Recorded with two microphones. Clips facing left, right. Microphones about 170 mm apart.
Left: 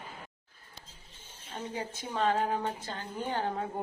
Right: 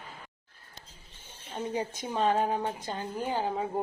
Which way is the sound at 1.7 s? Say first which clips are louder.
Right 3 dB; 15° right (ahead or behind).